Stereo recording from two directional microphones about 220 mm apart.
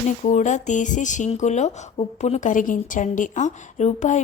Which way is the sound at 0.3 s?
35° left (ahead or behind).